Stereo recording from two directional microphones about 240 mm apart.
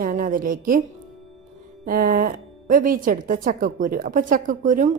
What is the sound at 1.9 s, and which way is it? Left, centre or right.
A woman's voice, right.